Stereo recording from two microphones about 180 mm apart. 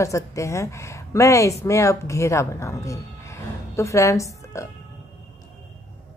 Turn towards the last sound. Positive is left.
turn(degrees=15)  # may be behind; listen again after turning